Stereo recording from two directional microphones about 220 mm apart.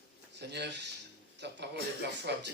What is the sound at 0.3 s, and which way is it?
Speech, 50° right (ahead or behind).